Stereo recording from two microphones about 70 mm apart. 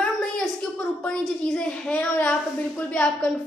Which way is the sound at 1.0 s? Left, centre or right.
Centre.